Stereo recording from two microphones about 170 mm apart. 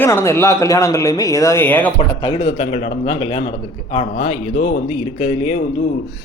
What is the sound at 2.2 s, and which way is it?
Speech, 35° left (ahead or behind).